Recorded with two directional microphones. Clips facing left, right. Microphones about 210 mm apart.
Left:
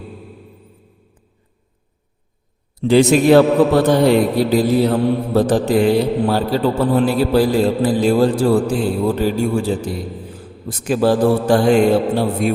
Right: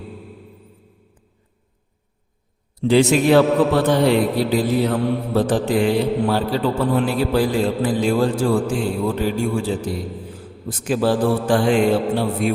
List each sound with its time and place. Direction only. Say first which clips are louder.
2.9 s a man's voice: left 3 dB; 40° left (ahead or behind)
10.8 s a man's voice: left 4 dB; 45° left (ahead or behind)